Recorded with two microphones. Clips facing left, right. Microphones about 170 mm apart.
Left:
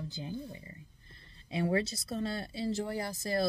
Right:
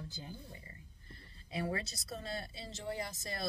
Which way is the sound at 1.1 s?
25° left (ahead or behind).